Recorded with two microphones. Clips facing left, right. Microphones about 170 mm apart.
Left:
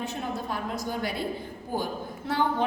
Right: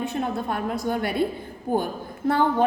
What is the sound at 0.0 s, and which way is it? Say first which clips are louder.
A woman's voice: right 6 dB; 60° right (ahead or behind).